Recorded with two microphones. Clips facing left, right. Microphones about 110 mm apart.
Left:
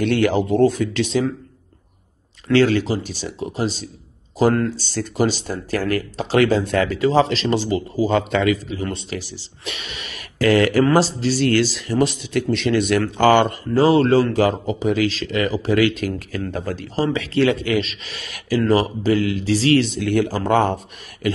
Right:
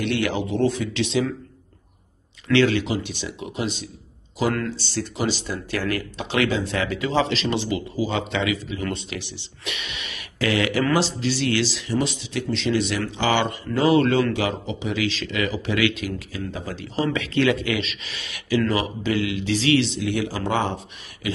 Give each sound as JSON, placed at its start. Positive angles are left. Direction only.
{"t": 0.0, "sound": "speech", "side_deg": 45}
{"t": 2.4, "sound": "speech", "side_deg": 40}
{"t": 8.7, "sound": "speech", "side_deg": 30}